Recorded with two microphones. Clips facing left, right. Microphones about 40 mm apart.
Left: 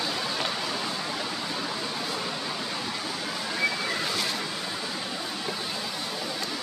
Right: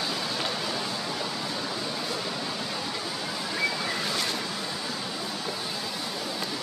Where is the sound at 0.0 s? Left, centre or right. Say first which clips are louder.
Left 1 dB; centre.